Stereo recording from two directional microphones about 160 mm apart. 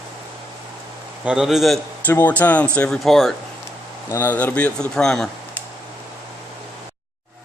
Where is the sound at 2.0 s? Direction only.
10° left (ahead or behind).